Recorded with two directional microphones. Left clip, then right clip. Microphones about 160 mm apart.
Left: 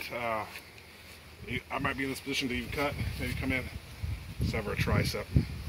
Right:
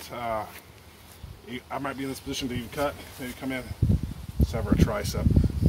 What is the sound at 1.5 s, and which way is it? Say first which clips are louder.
Speech: even; 15° right (ahead or behind).